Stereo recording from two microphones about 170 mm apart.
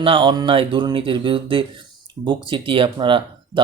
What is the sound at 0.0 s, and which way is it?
Speech, 30° right (ahead or behind).